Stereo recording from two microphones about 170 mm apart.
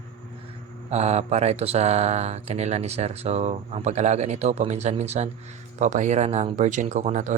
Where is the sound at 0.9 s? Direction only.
40° right (ahead or behind).